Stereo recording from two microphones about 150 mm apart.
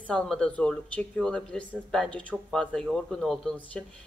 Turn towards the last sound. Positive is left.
turn(degrees=5)  # may be behind; listen again after turning